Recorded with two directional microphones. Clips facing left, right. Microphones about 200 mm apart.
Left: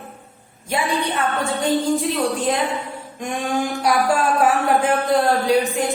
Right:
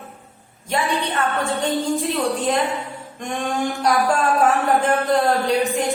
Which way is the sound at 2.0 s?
Centre (ahead or behind).